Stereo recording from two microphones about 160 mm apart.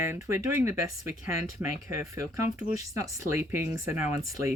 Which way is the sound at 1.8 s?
20° right (ahead or behind).